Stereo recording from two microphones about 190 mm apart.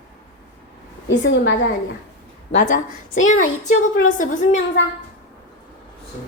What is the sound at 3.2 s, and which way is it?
A woman's voice, 40° left (ahead or behind).